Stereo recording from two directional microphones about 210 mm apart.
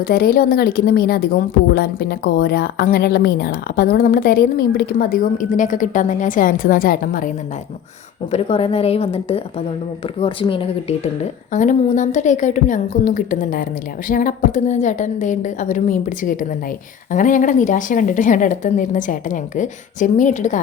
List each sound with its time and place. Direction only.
0.0 s a woman's voice: 45° left (ahead or behind)
8.3 s a woman's voice: 25° left (ahead or behind)